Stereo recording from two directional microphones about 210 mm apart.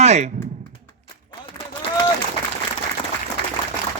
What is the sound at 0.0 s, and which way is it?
Speech, 30° right (ahead or behind).